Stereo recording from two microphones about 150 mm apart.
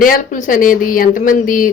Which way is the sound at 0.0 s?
65° left (ahead or behind).